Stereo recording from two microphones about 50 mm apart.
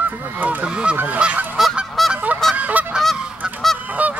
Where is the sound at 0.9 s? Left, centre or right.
Right.